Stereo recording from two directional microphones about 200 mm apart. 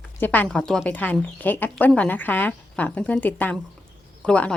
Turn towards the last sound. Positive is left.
turn(degrees=5)  # may be behind; listen again after turning